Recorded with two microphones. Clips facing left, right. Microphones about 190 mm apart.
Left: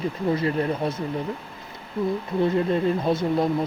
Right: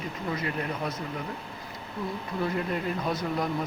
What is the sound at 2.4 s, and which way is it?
Speech, 25° left (ahead or behind).